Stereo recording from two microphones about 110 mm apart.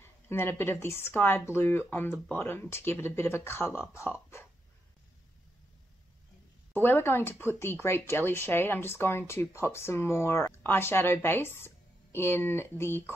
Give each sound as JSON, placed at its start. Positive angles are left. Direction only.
{"t": 0.0, "sound": "speech", "side_deg": 20}
{"t": 6.7, "sound": "speech", "side_deg": 20}